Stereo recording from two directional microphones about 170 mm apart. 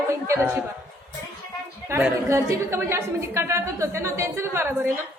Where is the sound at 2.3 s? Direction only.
15° right (ahead or behind).